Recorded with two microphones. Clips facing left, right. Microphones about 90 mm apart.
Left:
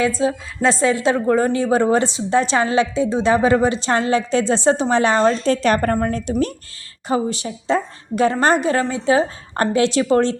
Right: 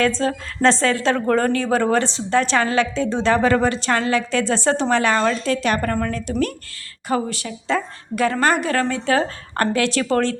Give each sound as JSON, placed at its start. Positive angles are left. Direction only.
{"t": 0.2, "sound": "a woman's voice", "side_deg": 5}
{"t": 5.3, "sound": "a woman's voice", "side_deg": 35}